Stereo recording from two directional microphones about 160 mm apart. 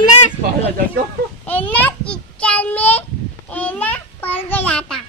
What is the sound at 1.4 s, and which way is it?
Child singing, 10° left (ahead or behind).